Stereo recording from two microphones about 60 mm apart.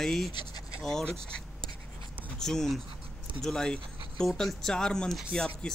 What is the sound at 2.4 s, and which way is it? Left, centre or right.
Speech, centre.